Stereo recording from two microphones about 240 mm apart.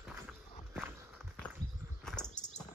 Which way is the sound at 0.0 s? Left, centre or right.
Centre.